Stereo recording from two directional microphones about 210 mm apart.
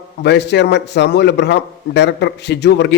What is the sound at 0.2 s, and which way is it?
A man's voice, 55° left (ahead or behind).